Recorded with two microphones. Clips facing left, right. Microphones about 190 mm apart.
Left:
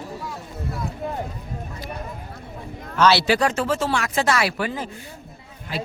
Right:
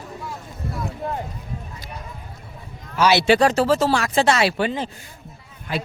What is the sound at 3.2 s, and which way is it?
Speech, 30° right (ahead or behind).